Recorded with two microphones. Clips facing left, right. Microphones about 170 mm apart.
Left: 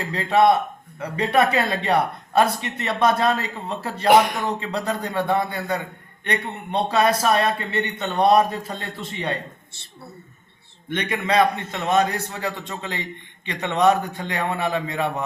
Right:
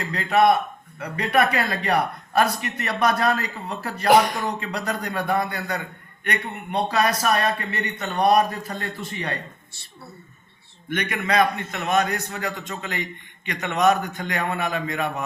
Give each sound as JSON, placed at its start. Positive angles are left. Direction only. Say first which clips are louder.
{"t": 0.0, "sound": "a man's voice", "louder": "left 1 dB", "side_deg": 30}